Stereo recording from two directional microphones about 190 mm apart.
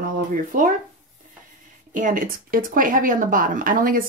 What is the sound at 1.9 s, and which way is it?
Speech, 45° right (ahead or behind).